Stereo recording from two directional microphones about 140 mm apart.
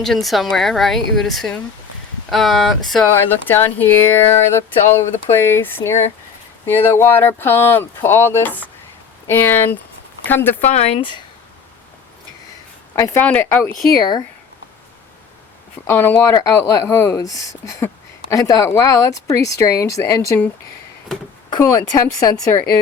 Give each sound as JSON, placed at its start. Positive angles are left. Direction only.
{"t": 0.0, "sound": "speech", "side_deg": 0}
{"t": 3.1, "sound": "speech", "side_deg": 15}
{"t": 10.7, "sound": "speech", "side_deg": 50}
{"t": 13.0, "sound": "speech", "side_deg": 15}
{"t": 15.9, "sound": "speech", "side_deg": 15}
{"t": 21.5, "sound": "speech", "side_deg": 25}